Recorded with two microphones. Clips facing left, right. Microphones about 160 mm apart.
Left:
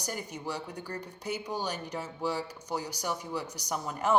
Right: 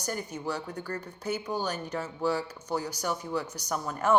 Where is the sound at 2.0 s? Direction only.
55° right (ahead or behind).